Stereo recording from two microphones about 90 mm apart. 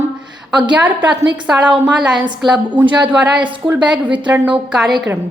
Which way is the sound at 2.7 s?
15° right (ahead or behind).